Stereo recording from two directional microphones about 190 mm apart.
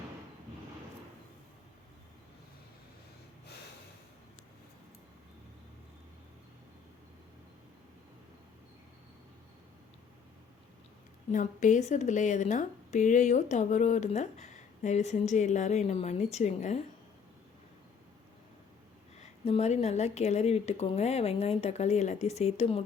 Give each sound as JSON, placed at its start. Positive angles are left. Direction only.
{"t": 11.3, "sound": "speech", "side_deg": 40}
{"t": 19.2, "sound": "speech", "side_deg": 35}